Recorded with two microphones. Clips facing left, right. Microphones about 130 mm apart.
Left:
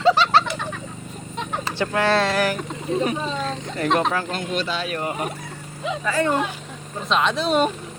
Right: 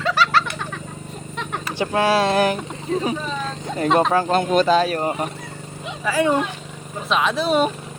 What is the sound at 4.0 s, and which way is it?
Speech, 35° right (ahead or behind).